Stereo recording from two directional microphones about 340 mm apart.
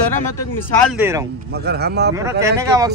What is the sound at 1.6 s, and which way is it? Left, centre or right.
Speech, right.